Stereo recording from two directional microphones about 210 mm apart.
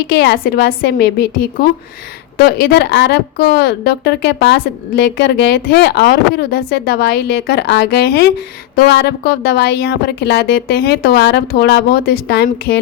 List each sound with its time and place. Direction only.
0.1 s a woman's voice: 50° left (ahead or behind)